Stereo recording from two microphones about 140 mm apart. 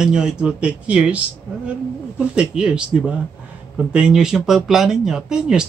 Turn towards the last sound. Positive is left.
turn(degrees=-5)  # may be behind; listen again after turning